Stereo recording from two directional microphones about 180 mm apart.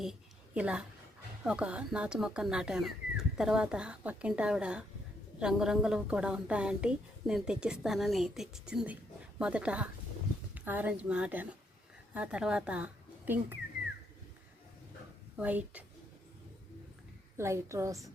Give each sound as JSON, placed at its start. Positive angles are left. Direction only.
{"t": 0.0, "sound": "a sound", "side_deg": -5}
{"t": 1.5, "sound": "a woman's voice", "side_deg": -5}
{"t": 15.4, "sound": "a woman's voice", "side_deg": -10}
{"t": 17.3, "sound": "a woman's voice", "side_deg": -15}